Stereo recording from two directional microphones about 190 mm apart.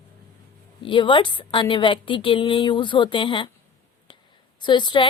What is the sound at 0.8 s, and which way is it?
A woman's voice, 25° left (ahead or behind).